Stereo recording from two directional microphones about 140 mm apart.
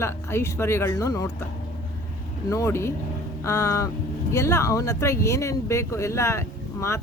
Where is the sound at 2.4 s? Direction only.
20° left (ahead or behind).